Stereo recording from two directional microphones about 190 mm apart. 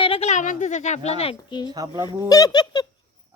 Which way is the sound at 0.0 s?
30° left (ahead or behind).